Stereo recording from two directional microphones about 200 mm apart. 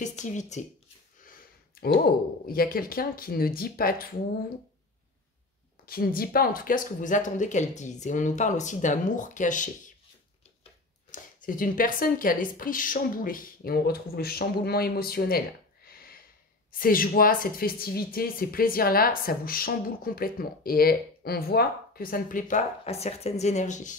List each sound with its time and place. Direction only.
0.0 s speech: 35° left (ahead or behind)
2.4 s speech: 45° left (ahead or behind)
5.9 s speech: 45° left (ahead or behind)